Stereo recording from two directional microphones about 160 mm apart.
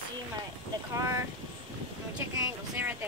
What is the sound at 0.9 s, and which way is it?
Speech, 15° right (ahead or behind).